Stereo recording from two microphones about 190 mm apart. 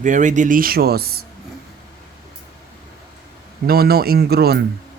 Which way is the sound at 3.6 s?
55° right (ahead or behind).